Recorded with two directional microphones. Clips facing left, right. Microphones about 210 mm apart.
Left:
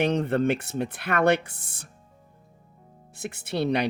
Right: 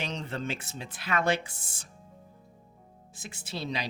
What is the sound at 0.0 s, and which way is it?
Speech, 60° left (ahead or behind).